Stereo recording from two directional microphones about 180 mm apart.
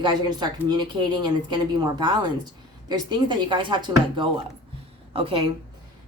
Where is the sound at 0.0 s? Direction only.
25° right (ahead or behind).